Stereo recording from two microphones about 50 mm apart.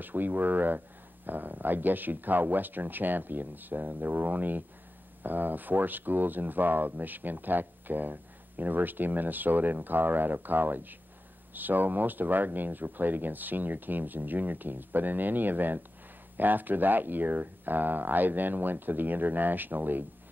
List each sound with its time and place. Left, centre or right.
0.0 s speech: right